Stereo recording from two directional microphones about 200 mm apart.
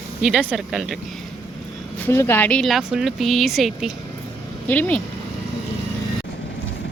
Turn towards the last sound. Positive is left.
turn(degrees=10)  # may be behind; listen again after turning